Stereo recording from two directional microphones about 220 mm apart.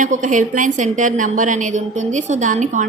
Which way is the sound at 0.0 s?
35° right (ahead or behind).